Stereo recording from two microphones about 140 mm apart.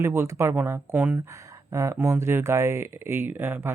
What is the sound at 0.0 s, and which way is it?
Speech, 20° right (ahead or behind).